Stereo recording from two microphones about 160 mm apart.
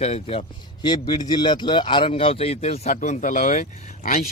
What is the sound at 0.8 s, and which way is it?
A man's voice, 25° left (ahead or behind).